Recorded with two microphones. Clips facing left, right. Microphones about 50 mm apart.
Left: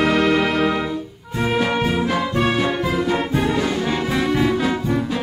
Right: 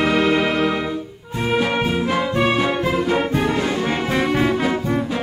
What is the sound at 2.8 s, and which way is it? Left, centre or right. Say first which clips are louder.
Music: right 1 dB; right.